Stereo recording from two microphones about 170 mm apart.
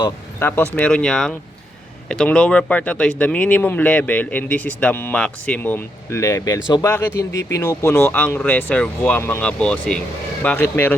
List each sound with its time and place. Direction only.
0.3 s speech: 15° left (ahead or behind)